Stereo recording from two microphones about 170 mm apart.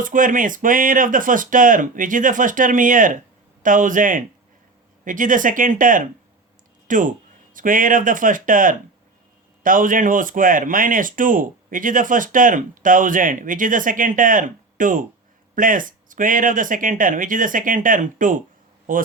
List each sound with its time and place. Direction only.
0.0 s a man's voice: 50° right (ahead or behind)